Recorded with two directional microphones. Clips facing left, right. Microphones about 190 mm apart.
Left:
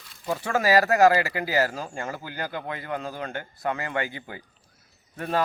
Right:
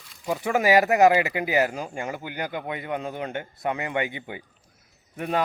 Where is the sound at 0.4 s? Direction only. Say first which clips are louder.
Right 2 dB; 20° right (ahead or behind).